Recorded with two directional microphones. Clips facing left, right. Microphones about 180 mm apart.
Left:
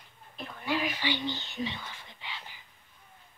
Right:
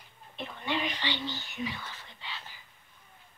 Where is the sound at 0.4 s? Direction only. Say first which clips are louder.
Left 1 dB; 5° left (ahead or behind).